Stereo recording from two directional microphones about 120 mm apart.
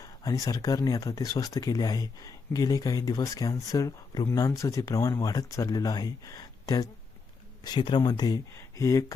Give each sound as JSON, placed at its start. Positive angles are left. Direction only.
{"t": 0.0, "sound": "speech", "side_deg": 30}
{"t": 8.5, "sound": "speech", "side_deg": 25}